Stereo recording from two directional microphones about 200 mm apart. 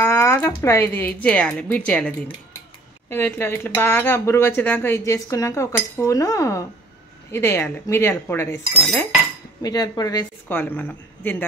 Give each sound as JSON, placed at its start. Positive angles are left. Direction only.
{"t": 0.0, "sound": "speech", "side_deg": 15}
{"t": 10.5, "sound": "speech", "side_deg": 10}